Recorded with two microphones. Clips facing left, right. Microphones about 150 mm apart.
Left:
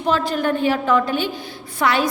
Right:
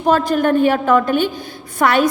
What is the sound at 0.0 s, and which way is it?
A woman's voice, 50° right (ahead or behind).